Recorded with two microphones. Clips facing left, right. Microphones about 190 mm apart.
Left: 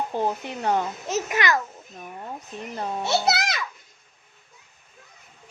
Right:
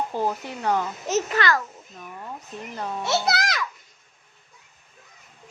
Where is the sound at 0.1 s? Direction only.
20° left (ahead or behind).